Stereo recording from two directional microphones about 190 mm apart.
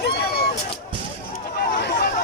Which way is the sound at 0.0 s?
55° left (ahead or behind).